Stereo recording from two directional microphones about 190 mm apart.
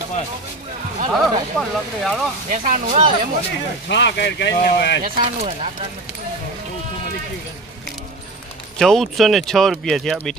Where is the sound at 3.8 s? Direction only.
65° left (ahead or behind).